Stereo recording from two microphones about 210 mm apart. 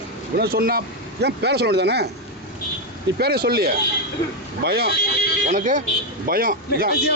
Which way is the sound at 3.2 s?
50° right (ahead or behind).